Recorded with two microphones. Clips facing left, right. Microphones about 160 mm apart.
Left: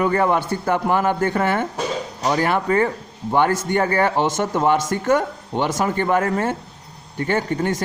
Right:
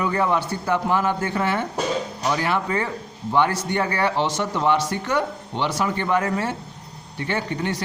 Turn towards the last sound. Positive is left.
turn(degrees=45)  # may be behind; listen again after turning